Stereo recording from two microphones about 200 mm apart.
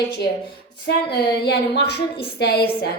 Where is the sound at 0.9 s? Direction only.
55° left (ahead or behind).